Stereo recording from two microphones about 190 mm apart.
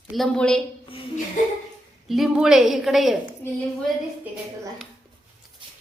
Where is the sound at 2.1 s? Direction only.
Centre (ahead or behind).